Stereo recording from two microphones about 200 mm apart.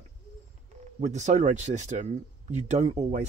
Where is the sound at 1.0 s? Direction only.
35° right (ahead or behind).